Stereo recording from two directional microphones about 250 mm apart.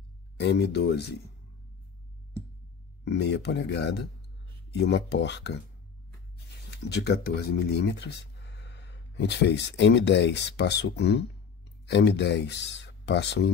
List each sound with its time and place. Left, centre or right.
0.4 s speech: left
3.1 s speech: left